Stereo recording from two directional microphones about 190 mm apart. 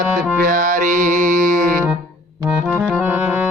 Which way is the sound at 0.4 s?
45° right (ahead or behind).